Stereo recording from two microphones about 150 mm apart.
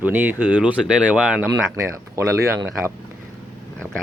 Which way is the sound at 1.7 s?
20° right (ahead or behind).